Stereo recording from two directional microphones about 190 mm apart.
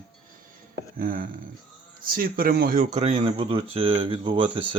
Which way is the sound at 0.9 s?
45° right (ahead or behind).